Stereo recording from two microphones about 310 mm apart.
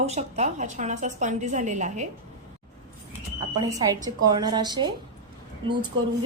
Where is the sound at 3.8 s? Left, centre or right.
Centre.